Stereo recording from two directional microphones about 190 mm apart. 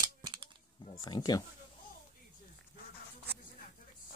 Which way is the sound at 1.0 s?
20° left (ahead or behind).